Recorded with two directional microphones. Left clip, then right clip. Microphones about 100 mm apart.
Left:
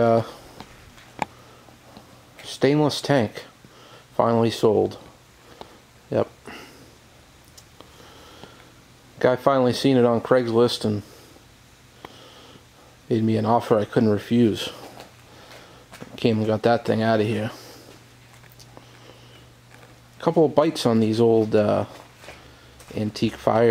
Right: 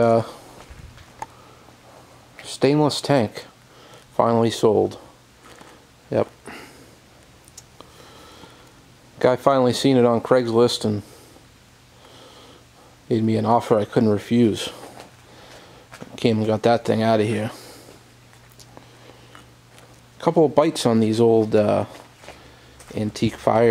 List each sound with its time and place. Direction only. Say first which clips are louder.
0.0 s speech: right 2 dB; centre (ahead or behind)
2.4 s speech: right 1 dB; 5° right (ahead or behind)
6.0 s a sound: right 1 dB; 5° right (ahead or behind)
9.2 s speech: right 2 dB; 10° right (ahead or behind)
13.1 s speech: right 2 dB; centre (ahead or behind)
16.0 s speech: right 1 dB; 5° right (ahead or behind)
20.2 s speech: right 2 dB; 5° right (ahead or behind)